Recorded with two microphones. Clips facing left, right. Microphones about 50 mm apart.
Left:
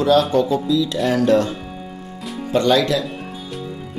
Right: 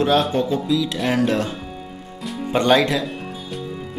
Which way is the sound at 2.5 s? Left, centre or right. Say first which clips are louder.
Even; right.